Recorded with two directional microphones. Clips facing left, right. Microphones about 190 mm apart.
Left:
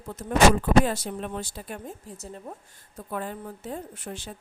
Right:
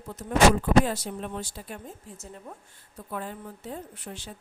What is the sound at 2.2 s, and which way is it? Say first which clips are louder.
Speech: left 4 dB; 35° left (ahead or behind).